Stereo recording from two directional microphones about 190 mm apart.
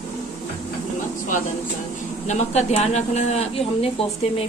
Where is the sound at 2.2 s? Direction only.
35° left (ahead or behind).